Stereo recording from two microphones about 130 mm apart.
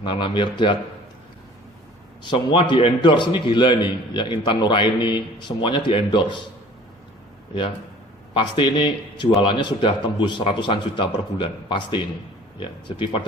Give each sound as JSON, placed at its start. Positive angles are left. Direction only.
{"t": 0.0, "sound": "a man's voice", "side_deg": 40}
{"t": 2.3, "sound": "a man's voice", "side_deg": 40}
{"t": 8.3, "sound": "a man's voice", "side_deg": 40}